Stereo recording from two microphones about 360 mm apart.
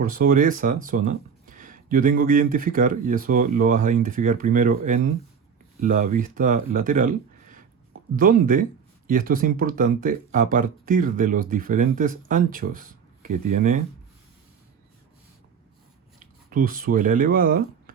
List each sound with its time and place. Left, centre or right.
0.0 s speech: right
16.2 s speech: right